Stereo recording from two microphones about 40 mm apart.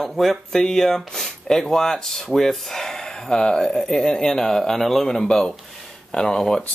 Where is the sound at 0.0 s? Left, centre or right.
Centre.